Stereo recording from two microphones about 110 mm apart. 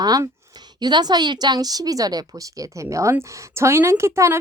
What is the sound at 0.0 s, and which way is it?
Speech, 35° right (ahead or behind).